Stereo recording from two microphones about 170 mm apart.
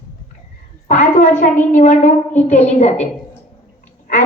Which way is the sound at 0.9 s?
45° left (ahead or behind).